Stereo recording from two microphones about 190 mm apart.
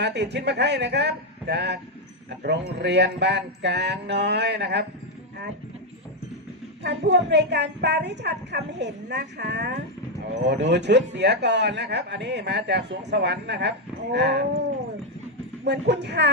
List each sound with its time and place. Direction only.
0.0 s a man's voice: 60° right (ahead or behind)
6.8 s a man's voice: 65° right (ahead or behind)
15.6 s a man's voice: 65° right (ahead or behind)